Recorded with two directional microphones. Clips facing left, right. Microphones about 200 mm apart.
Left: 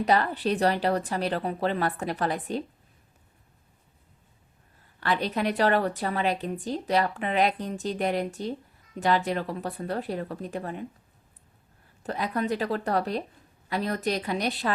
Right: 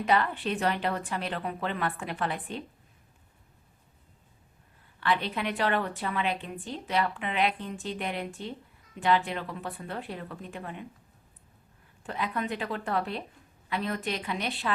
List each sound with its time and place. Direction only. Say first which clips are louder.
0.0 s a woman's voice: left 3 dB; 40° left (ahead or behind)
4.9 s a woman's voice: left 2 dB; 40° left (ahead or behind)
12.0 s a woman's voice: left 4 dB; 40° left (ahead or behind)